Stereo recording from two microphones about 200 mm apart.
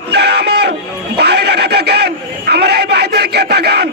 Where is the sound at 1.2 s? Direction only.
55° right (ahead or behind).